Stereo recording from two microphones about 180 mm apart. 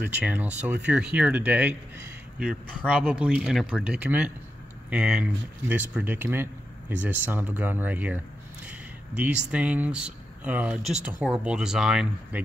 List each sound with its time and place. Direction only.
0.1 s speech: 10° right (ahead or behind)
2.9 s speech: 5° right (ahead or behind)